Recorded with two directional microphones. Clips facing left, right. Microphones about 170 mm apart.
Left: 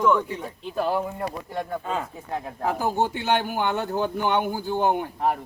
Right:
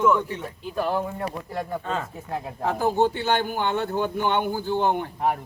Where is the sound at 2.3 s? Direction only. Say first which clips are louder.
Even; centre (ahead or behind).